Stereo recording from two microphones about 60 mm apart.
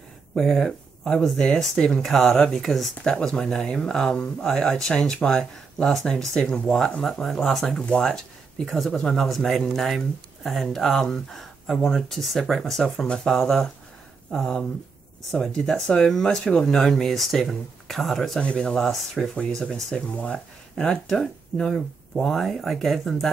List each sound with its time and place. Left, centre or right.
0.4 s speech: centre
18.4 s speech: centre
18.7 s speech: centre
19.3 s speech: centre
20.1 s speech: left; by 23.3 s centre